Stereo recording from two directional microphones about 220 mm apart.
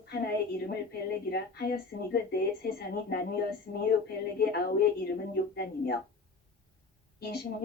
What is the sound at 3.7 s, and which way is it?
Female singing, 40° left (ahead or behind).